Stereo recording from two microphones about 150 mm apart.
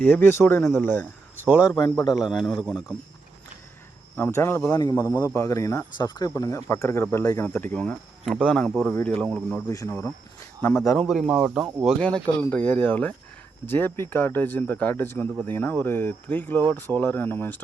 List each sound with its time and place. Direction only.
0.1 s speech: 15° left (ahead or behind)
2.1 s a man's voice: centre (ahead or behind)
4.2 s speech: 15° left (ahead or behind)
9.6 s speech: 20° left (ahead or behind)
11.0 s speech: centre (ahead or behind)